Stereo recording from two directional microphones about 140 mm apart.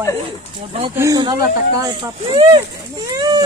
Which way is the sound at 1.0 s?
25° right (ahead or behind).